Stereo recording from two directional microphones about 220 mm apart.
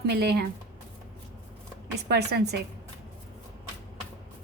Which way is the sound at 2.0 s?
50° right (ahead or behind).